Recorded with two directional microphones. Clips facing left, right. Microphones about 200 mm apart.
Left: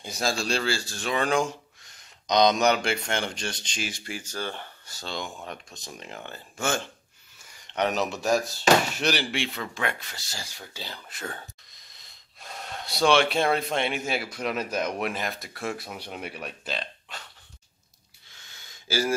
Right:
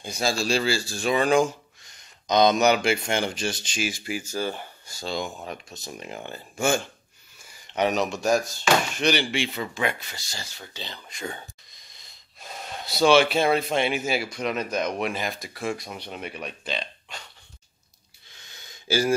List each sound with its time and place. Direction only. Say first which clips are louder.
0.0 s speech: right 2 dB; centre (ahead or behind)
18.9 s speech: right 4 dB; 20° right (ahead or behind)